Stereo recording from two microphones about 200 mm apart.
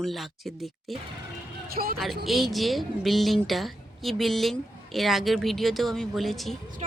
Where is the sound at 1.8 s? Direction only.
45° right (ahead or behind).